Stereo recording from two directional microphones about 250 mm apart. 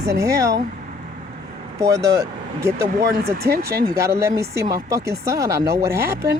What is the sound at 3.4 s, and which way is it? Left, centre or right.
Speech, right.